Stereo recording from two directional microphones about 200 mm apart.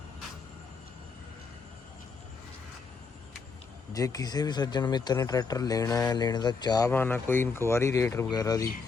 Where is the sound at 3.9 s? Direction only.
20° left (ahead or behind).